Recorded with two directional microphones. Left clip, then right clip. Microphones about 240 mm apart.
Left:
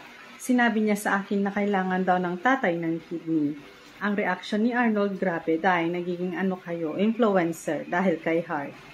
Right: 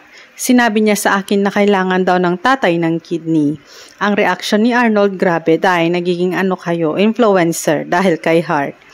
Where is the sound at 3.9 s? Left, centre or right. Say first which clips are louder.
Right 13 dB; right.